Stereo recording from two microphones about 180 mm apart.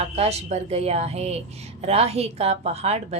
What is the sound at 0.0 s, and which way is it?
A woman's voice, 35° right (ahead or behind).